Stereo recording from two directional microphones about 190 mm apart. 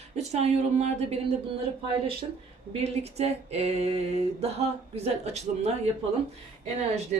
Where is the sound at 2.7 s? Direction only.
35° right (ahead or behind).